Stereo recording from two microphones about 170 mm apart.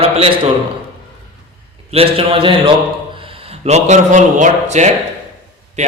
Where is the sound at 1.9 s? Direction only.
35° right (ahead or behind).